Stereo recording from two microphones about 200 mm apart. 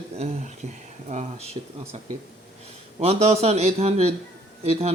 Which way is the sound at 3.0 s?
30° right (ahead or behind).